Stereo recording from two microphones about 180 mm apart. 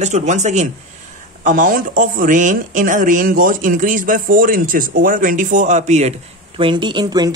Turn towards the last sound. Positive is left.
turn(degrees=-20)  # may be behind; listen again after turning